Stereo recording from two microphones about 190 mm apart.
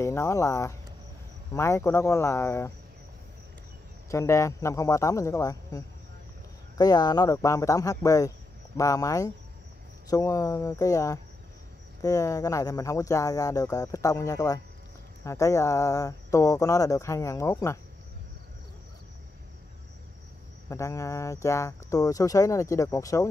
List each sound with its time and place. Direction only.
0.0 s speech: 15° left (ahead or behind)
4.1 s speech: 15° left (ahead or behind)
20.6 s speech: 15° left (ahead or behind)